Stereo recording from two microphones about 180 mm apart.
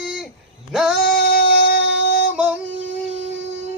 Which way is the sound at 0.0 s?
Centre (ahead or behind).